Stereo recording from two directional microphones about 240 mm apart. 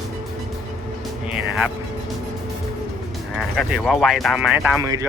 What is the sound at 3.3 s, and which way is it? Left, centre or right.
Speech, centre.